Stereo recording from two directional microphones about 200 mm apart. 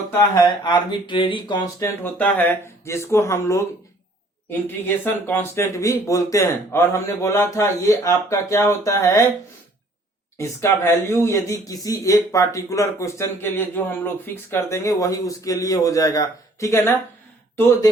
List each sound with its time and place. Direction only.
0.1 s speech: 15° left (ahead or behind)
2.1 s speech: 10° left (ahead or behind)
5.0 s speech: 10° left (ahead or behind)
10.3 s speech: 15° left (ahead or behind)